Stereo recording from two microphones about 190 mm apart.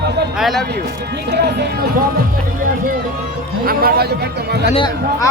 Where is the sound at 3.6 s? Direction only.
55° right (ahead or behind).